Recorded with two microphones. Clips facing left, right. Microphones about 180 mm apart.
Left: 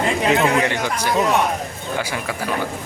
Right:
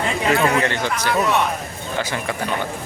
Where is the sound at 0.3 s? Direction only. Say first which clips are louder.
Even; 15° left (ahead or behind).